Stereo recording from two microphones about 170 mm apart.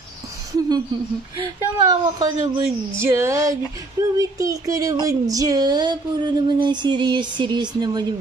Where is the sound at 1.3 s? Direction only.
25° right (ahead or behind).